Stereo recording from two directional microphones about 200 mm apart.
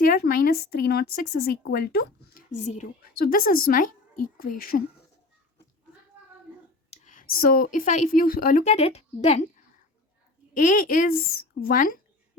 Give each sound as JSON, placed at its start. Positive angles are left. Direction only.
{"t": 0.0, "sound": "a woman's voice", "side_deg": 50}
{"t": 6.9, "sound": "a woman's voice", "side_deg": 40}
{"t": 10.5, "sound": "a woman's voice", "side_deg": 40}